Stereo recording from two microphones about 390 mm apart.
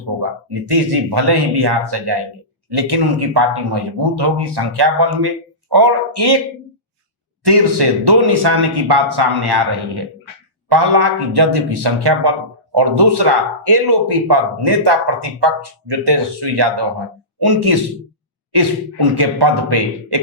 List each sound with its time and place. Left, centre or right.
0.2 s speech: right
7.4 s speech: right
17.4 s speech: right